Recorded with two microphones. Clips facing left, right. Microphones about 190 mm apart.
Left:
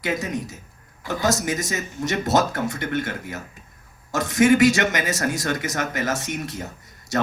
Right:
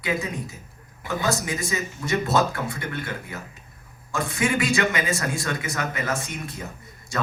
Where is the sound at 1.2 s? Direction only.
40° left (ahead or behind).